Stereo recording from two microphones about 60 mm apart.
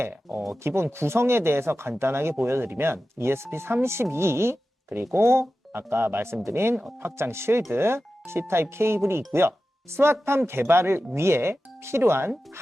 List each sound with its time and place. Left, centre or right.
0.0 s speech: right